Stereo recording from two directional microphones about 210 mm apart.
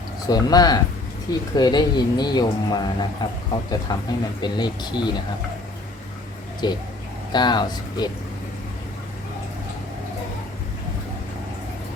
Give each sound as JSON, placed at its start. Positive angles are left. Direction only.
{"t": 0.3, "sound": "speech", "side_deg": 20}
{"t": 6.6, "sound": "speech", "side_deg": 20}